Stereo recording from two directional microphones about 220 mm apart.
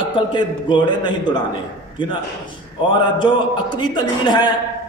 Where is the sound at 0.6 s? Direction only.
20° left (ahead or behind).